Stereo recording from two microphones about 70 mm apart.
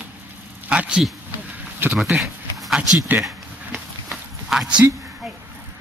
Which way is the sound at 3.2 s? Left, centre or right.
Centre.